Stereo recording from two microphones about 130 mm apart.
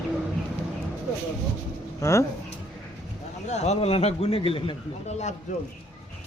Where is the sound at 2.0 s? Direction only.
20° left (ahead or behind).